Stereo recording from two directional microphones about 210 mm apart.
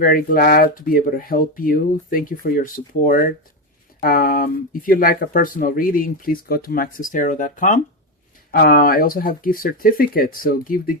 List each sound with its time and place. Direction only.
0.0 s speech: 40° left (ahead or behind)